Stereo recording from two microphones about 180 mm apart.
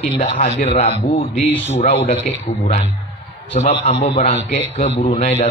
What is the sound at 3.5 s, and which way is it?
A man's voice, 35° left (ahead or behind).